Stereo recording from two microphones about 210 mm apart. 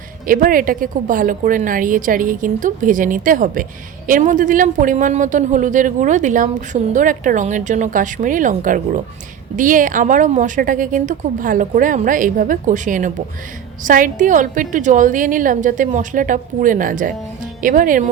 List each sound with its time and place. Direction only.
0.3 s a woman's voice: 40° right (ahead or behind)